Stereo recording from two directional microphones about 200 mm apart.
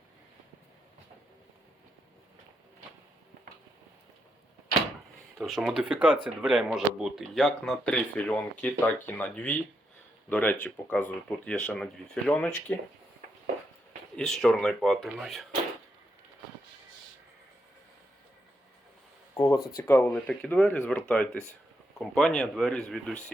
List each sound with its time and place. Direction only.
5.4 s speech: centre (ahead or behind)
14.2 s speech: 5° left (ahead or behind)
19.3 s a sound: 15° left (ahead or behind)
19.7 s speech: 10° left (ahead or behind)